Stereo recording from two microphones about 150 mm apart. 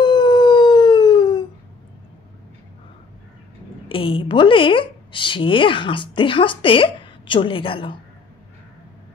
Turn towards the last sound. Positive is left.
turn(degrees=35)  # may be behind; listen again after turning